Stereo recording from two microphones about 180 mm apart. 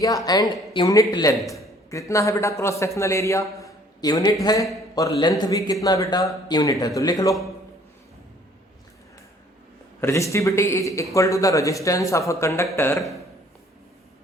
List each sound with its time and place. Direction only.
0.3 s a man's voice: 20° left (ahead or behind)
3.6 s a sound: 20° left (ahead or behind)
5.0 s speech: 20° left (ahead or behind)
10.0 s a man's voice: 15° left (ahead or behind)